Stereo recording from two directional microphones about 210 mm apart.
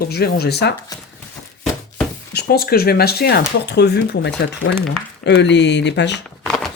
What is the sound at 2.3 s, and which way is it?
Speech, 50° left (ahead or behind).